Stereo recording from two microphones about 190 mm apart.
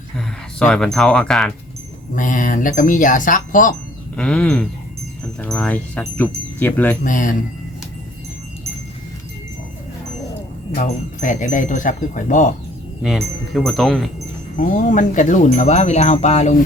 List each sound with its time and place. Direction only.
0.6 s speech: 5° left (ahead or behind)
2.1 s speech: 45° left (ahead or behind)
4.2 s speech: 5° left (ahead or behind)
7.0 s speech: 45° left (ahead or behind)
10.8 s wind chime: 40° left (ahead or behind)
13.0 s speech: centre (ahead or behind)
14.5 s wind chime: 40° left (ahead or behind)